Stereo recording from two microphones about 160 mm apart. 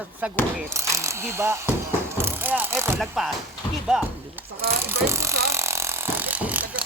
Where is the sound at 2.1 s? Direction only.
15° right (ahead or behind).